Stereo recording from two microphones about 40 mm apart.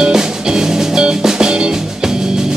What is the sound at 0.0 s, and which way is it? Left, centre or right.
Music, centre.